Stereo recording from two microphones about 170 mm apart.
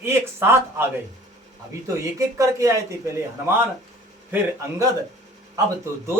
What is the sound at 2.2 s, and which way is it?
Speech, 20° right (ahead or behind).